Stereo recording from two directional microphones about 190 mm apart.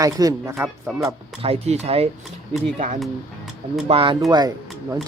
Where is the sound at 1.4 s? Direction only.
30° right (ahead or behind).